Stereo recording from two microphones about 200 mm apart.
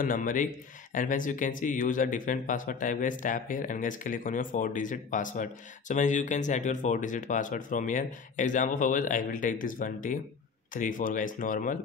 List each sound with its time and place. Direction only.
0.0 s a man's voice: 40° left (ahead or behind)